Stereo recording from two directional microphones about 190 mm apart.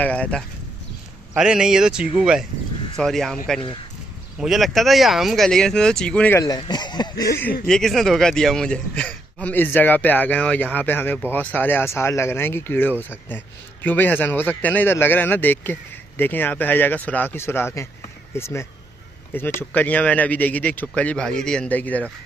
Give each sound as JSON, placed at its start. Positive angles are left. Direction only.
{"t": 0.0, "sound": "speech", "side_deg": 5}
{"t": 1.3, "sound": "speech", "side_deg": -5}
{"t": 4.4, "sound": "speech", "side_deg": 0}
{"t": 6.4, "sound": "a sound", "side_deg": 20}
{"t": 7.6, "sound": "speech", "side_deg": 0}